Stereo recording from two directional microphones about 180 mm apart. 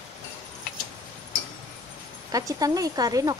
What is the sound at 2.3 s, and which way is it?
Speech, 20° right (ahead or behind).